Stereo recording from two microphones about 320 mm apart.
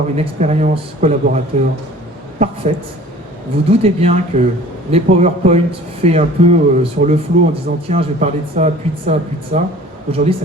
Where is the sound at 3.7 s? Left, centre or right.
Centre.